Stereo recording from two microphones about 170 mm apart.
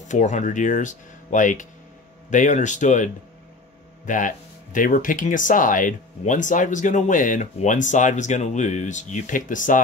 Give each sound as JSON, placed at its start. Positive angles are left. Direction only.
{"t": 0.1, "sound": "speech", "side_deg": 45}